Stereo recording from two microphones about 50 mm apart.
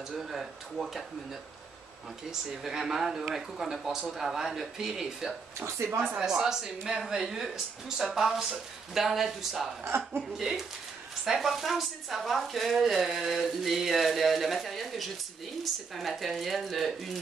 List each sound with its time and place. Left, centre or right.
0.2 s speech: centre
2.5 s speech: centre
5.8 s speech: right
6.1 s speech: centre
9.8 s speech: right
10.3 s speech: centre